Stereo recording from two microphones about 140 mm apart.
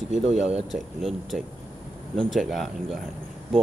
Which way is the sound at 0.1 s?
55° right (ahead or behind).